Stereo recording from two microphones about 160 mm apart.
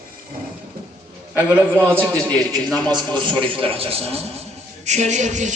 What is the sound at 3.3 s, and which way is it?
A man's voice, 35° right (ahead or behind).